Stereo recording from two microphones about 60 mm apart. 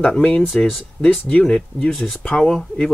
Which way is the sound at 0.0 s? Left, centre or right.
Centre.